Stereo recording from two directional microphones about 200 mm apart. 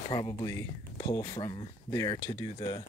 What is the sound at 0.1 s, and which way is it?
Speech, 20° left (ahead or behind).